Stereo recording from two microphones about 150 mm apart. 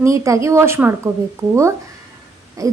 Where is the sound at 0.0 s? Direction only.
20° right (ahead or behind).